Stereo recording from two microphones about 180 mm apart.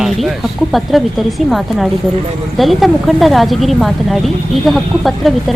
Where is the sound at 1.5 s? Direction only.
Centre (ahead or behind).